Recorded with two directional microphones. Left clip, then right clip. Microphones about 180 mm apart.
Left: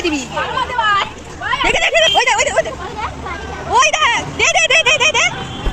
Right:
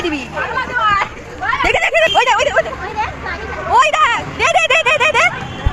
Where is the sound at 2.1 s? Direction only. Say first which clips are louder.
Right 1 dB; 5° right (ahead or behind).